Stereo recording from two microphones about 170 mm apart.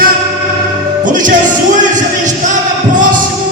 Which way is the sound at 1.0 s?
50° right (ahead or behind).